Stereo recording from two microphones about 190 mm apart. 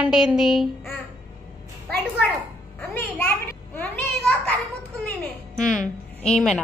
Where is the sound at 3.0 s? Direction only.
10° left (ahead or behind).